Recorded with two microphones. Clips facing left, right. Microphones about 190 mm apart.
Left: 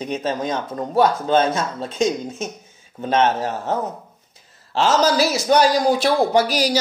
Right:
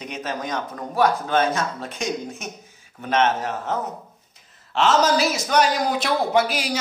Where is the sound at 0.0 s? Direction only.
30° left (ahead or behind).